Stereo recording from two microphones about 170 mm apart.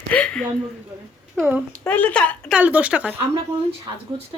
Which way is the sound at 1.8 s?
10° left (ahead or behind).